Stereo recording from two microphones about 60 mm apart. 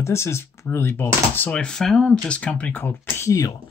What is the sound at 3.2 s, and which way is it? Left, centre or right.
Speech, left.